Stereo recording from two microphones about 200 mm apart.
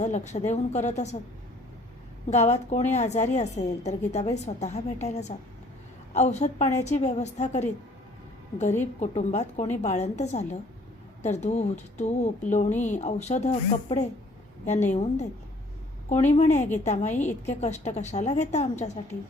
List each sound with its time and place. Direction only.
0.0 s a woman's voice: 35° left (ahead or behind)
2.3 s a woman's voice: 35° left (ahead or behind)
8.8 s a woman's voice: 35° left (ahead or behind)